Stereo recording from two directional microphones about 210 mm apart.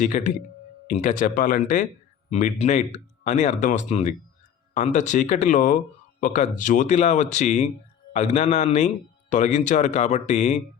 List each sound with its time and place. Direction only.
0.0 s speech: 35° left (ahead or behind)